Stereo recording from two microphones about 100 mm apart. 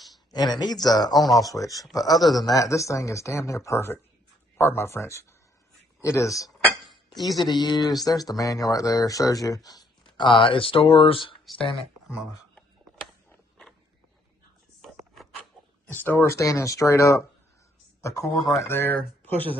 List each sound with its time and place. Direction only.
0.3 s speech: 45° left (ahead or behind)
7.3 s speech: 45° left (ahead or behind)
15.9 s speech: 20° left (ahead or behind)
18.3 s speech: centre (ahead or behind)
18.7 s speech: 20° left (ahead or behind)